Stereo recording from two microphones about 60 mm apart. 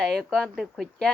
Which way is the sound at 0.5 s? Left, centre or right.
Centre.